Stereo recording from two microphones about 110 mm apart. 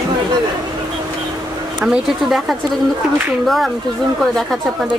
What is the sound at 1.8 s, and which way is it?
Speech, 5° right (ahead or behind).